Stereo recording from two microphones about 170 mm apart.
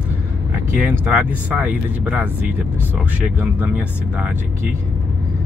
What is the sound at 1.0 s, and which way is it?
Speech, 10° right (ahead or behind).